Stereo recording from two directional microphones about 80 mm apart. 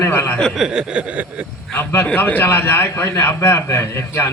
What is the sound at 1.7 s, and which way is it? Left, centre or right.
A man's voice, left.